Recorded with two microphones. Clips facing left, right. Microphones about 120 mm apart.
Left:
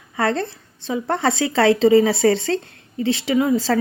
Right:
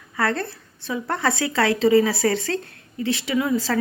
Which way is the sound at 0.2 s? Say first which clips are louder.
Left 3 dB; 25° left (ahead or behind).